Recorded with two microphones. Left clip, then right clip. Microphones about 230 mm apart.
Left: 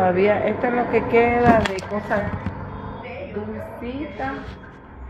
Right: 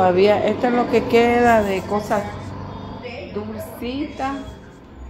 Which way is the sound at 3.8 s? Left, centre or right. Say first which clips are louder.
Right 4 dB; centre.